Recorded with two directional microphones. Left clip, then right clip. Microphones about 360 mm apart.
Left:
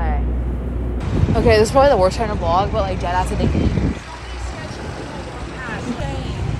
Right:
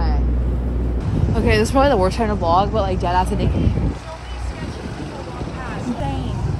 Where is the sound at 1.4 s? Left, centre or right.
Centre.